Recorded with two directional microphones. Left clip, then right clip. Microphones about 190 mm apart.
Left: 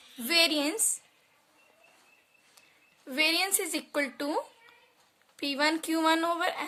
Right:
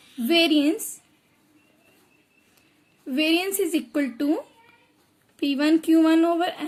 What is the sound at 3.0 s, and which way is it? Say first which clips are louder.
Speech: right 4 dB; 25° left (ahead or behind).